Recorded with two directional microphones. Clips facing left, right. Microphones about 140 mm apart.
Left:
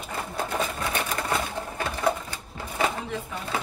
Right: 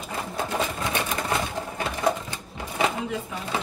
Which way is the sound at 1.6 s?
10° right (ahead or behind).